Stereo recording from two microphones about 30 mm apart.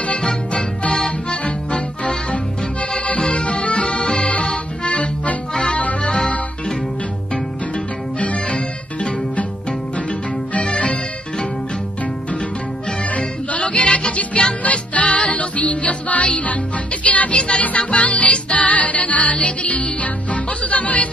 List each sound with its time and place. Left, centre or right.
0.5 s music: left
0.9 s accordion: left
3.2 s music: left
4.2 s accordion: left
5.5 s music: left
7.7 s music: left
10.6 s music: left
13.6 s music: left